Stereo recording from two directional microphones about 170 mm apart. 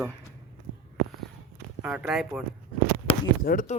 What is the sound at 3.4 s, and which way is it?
Speech, 55° left (ahead or behind).